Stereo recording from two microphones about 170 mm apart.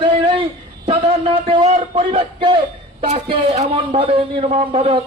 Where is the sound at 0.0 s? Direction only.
30° right (ahead or behind).